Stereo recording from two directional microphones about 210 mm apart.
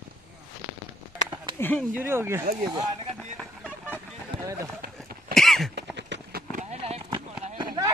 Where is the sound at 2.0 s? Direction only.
10° right (ahead or behind).